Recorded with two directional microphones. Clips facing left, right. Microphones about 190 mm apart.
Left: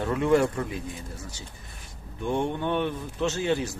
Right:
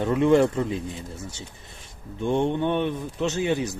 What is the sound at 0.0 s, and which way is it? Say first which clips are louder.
Speech: right 4 dB; 20° right (ahead or behind).